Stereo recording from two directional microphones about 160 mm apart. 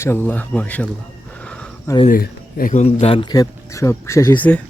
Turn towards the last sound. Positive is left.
turn(degrees=20)  # may be behind; listen again after turning